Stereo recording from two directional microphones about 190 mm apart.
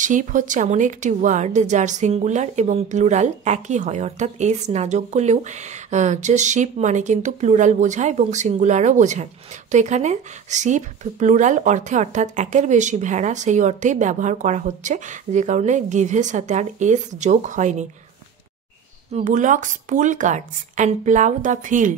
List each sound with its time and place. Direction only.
0.0 s a woman's voice: 40° right (ahead or behind)
19.1 s a woman's voice: 40° right (ahead or behind)